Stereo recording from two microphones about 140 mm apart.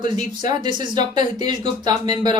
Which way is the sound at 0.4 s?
30° right (ahead or behind).